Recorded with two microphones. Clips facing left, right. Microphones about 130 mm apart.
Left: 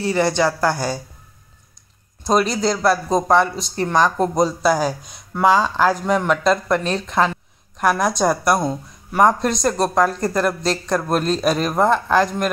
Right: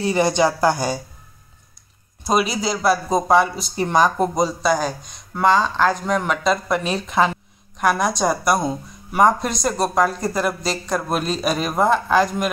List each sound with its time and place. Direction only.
0.0 s speech: 15° right (ahead or behind)
2.2 s speech: 5° right (ahead or behind)